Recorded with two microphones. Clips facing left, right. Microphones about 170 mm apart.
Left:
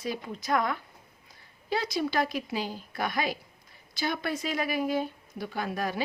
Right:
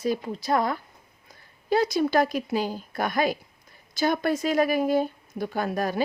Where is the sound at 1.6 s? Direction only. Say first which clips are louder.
Right 7 dB; 45° right (ahead or behind).